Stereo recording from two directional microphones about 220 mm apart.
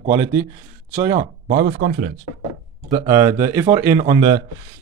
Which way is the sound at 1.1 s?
40° right (ahead or behind).